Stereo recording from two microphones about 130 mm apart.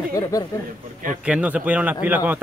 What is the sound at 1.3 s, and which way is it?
Speech, 10° right (ahead or behind).